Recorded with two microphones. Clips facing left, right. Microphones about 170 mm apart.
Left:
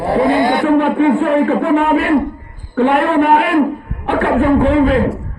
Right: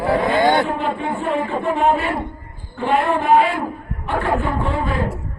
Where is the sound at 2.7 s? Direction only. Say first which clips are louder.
Left 6 dB; 65° left (ahead or behind).